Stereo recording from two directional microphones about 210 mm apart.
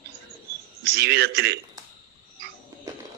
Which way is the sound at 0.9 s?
50° right (ahead or behind).